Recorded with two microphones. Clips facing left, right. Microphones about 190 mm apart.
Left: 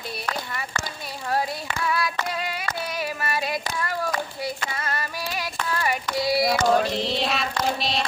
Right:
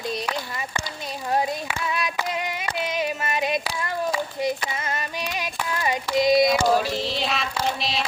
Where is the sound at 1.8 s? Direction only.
20° right (ahead or behind).